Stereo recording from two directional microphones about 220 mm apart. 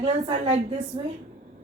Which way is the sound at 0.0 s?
25° right (ahead or behind).